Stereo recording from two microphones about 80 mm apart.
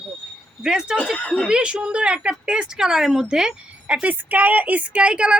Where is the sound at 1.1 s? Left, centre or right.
Centre.